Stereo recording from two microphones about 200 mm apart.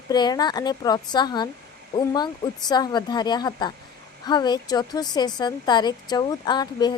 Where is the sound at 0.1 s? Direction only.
20° left (ahead or behind).